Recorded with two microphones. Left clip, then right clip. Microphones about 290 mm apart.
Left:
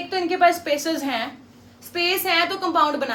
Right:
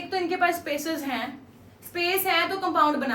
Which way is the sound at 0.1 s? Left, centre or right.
Left.